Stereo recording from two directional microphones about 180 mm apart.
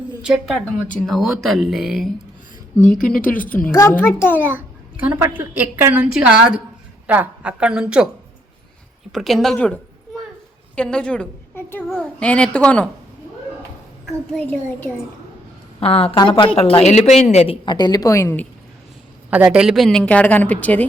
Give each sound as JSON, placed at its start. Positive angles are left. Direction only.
{"t": 0.2, "sound": "a woman's voice", "side_deg": -5}
{"t": 4.4, "sound": "a woman's voice", "side_deg": -10}
{"t": 9.1, "sound": "a woman's voice", "side_deg": 0}
{"t": 14.3, "sound": "a woman's voice", "side_deg": 10}
{"t": 15.8, "sound": "a woman's voice", "side_deg": 35}
{"t": 16.2, "sound": "a woman's voice", "side_deg": 20}
{"t": 16.6, "sound": "a woman's voice", "side_deg": 35}
{"t": 19.3, "sound": "a woman's voice", "side_deg": -5}